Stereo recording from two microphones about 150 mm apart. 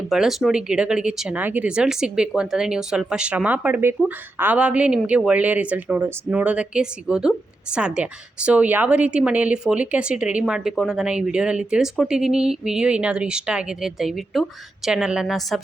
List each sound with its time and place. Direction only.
0.1 s speech: centre (ahead or behind)